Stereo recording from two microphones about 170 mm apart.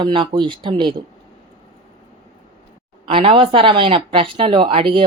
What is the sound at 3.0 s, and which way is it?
Speech, 30° right (ahead or behind).